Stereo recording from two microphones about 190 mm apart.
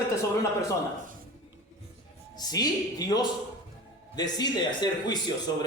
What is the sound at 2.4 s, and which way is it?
A man's voice, 20° left (ahead or behind).